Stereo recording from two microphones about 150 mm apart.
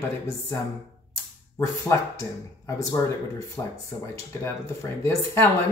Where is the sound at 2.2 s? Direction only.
20° left (ahead or behind).